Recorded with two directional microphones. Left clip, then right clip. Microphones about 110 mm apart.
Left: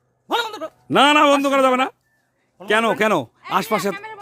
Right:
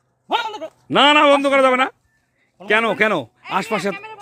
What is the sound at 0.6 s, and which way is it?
Speech, 35° left (ahead or behind).